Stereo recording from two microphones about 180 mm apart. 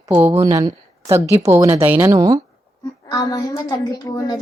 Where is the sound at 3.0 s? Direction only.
20° left (ahead or behind).